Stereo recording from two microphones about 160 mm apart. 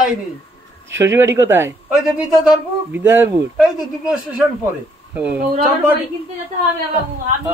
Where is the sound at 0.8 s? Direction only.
15° right (ahead or behind).